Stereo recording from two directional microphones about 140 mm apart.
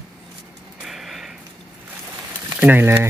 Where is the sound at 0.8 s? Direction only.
Centre (ahead or behind).